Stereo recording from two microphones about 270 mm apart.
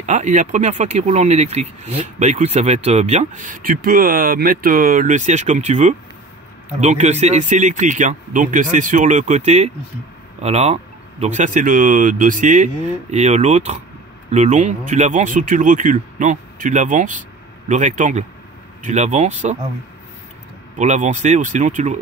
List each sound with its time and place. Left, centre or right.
0.0 s speech: right
20.7 s speech: right